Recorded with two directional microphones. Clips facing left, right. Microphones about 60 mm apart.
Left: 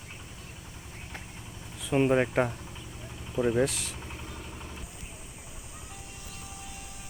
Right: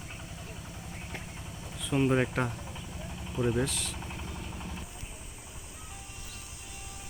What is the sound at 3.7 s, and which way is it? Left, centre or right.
Speech, right.